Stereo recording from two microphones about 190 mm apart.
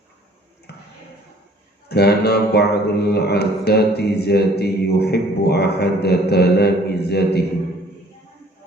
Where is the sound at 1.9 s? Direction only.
60° left (ahead or behind).